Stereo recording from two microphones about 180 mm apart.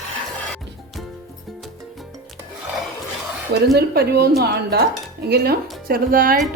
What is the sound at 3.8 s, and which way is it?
Speech, 60° right (ahead or behind).